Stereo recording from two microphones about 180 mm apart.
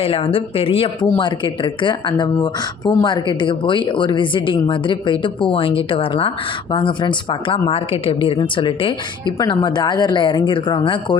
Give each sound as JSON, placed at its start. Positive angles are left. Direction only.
{"t": 0.0, "sound": "speech", "side_deg": 30}